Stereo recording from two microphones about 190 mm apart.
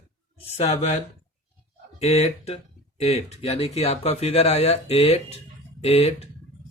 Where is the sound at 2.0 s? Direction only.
35° left (ahead or behind).